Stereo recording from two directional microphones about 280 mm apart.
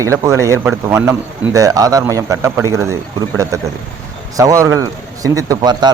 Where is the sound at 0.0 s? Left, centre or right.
Centre.